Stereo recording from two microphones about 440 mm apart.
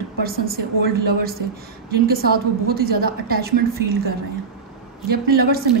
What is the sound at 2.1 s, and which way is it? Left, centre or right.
A woman's voice, right.